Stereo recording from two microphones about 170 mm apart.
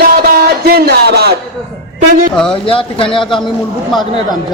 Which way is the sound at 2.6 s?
30° left (ahead or behind).